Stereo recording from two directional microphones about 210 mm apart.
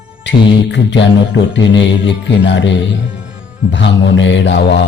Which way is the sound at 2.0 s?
60° left (ahead or behind).